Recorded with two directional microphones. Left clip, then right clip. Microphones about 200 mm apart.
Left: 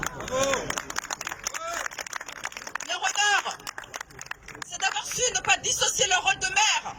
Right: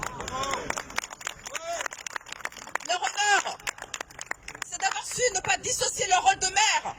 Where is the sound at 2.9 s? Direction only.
25° right (ahead or behind).